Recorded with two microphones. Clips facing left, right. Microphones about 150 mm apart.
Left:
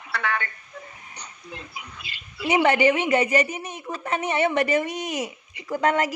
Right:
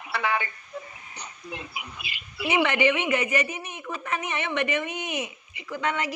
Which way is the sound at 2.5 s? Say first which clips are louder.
Left 4 dB; 35° left (ahead or behind).